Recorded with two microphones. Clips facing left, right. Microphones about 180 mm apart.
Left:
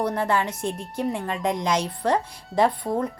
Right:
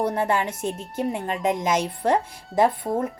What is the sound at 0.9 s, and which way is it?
A woman's voice, 20° right (ahead or behind).